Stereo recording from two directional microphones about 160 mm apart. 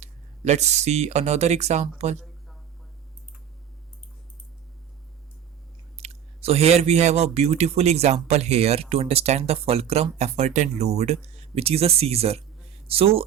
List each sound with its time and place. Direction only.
0.0 s speech: 45° right (ahead or behind)
2.1 s a sound: centre (ahead or behind)
6.0 s speech: 40° right (ahead or behind)